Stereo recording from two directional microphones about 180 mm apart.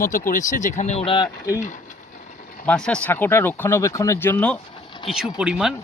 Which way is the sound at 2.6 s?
5° left (ahead or behind).